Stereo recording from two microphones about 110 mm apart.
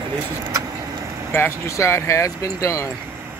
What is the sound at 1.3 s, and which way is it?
Speech, 25° left (ahead or behind).